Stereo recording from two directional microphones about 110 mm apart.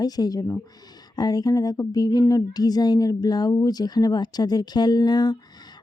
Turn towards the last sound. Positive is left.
turn(degrees=40)  # may be behind; listen again after turning